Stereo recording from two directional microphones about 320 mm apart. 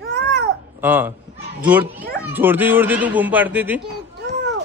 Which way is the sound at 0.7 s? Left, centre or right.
Centre.